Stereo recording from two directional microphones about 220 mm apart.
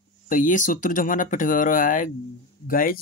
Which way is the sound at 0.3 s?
35° left (ahead or behind).